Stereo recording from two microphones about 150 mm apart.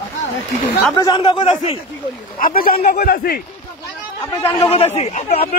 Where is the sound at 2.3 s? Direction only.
70° left (ahead or behind).